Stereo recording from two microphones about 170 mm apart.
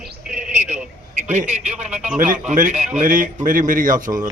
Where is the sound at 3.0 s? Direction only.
50° right (ahead or behind).